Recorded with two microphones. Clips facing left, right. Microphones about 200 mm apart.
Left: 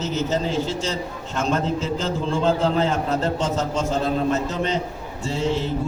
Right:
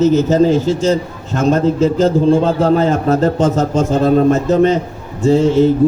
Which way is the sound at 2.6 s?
45° right (ahead or behind).